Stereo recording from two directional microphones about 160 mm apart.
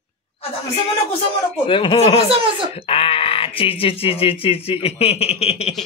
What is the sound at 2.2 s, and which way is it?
Speech, 35° right (ahead or behind).